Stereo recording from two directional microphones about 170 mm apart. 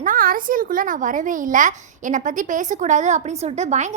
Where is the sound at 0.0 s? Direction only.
55° right (ahead or behind).